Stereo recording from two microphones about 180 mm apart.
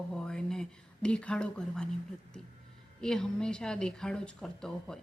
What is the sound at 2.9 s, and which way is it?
Speech, 5° left (ahead or behind).